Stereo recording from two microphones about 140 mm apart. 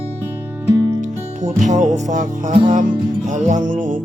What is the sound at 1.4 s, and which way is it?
Music, 60° right (ahead or behind).